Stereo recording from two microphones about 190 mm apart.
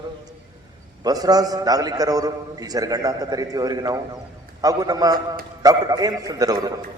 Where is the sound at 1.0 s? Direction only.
20° right (ahead or behind).